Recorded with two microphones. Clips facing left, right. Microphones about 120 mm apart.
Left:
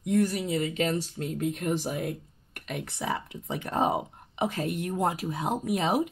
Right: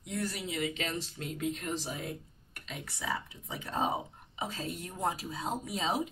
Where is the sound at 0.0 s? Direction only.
45° left (ahead or behind).